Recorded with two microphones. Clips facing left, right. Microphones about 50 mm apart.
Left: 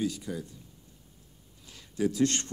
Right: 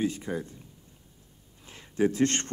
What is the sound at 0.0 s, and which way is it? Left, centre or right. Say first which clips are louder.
Speech: right 3 dB; right.